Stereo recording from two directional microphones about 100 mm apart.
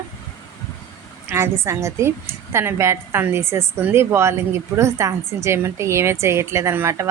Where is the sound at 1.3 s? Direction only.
25° right (ahead or behind).